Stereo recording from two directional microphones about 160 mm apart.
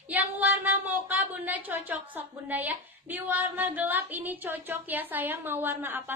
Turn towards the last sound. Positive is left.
turn(degrees=-15)  # may be behind; listen again after turning